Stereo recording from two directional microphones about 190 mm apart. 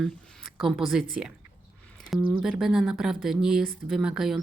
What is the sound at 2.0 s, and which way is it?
Speech, centre (ahead or behind).